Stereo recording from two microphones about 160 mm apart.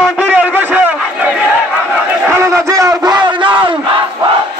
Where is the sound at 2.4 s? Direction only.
20° right (ahead or behind).